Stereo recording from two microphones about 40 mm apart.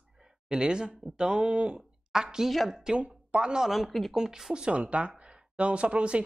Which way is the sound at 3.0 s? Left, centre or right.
Right.